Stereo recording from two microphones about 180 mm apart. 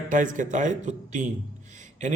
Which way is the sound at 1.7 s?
40° right (ahead or behind).